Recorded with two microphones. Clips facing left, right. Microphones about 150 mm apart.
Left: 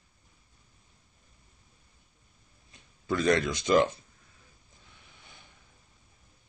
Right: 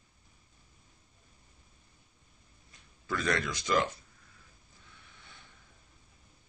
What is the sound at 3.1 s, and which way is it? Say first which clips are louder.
Speech: left 6 dB; 20° left (ahead or behind).